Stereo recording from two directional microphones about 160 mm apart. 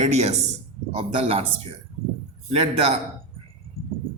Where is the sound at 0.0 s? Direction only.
45° right (ahead or behind).